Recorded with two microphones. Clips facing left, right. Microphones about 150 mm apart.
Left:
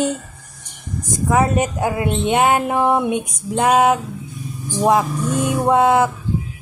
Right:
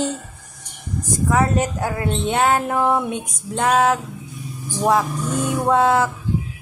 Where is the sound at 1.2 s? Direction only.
15° left (ahead or behind).